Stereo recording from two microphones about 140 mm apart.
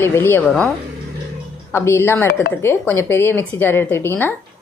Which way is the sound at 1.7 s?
20° left (ahead or behind).